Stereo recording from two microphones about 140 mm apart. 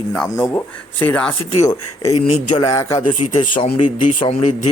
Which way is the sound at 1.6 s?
25° left (ahead or behind).